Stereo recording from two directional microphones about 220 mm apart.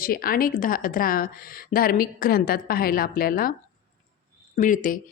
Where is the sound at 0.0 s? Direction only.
40° left (ahead or behind).